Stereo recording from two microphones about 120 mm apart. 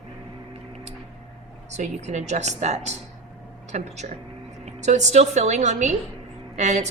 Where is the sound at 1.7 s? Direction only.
75° right (ahead or behind).